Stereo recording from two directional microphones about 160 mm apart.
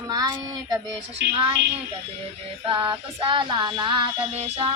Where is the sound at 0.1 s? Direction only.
25° right (ahead or behind).